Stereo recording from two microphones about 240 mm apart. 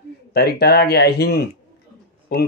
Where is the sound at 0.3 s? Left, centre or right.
Left.